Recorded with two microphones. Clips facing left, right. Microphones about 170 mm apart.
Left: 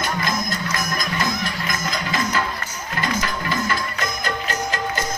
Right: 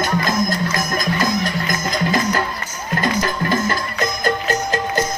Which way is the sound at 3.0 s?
45° right (ahead or behind).